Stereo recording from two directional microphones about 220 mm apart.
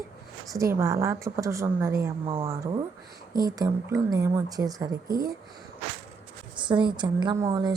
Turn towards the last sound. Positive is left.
turn(degrees=-15)  # may be behind; listen again after turning